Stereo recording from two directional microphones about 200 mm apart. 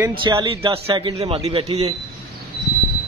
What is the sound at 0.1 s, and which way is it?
Speech, 25° right (ahead or behind).